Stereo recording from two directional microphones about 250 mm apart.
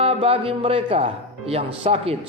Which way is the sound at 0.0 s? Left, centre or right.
Right.